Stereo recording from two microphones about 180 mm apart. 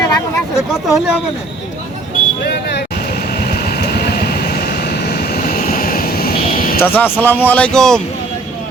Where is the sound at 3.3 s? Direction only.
60° left (ahead or behind).